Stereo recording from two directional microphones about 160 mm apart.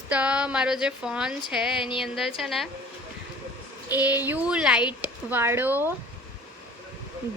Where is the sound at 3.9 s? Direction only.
10° right (ahead or behind).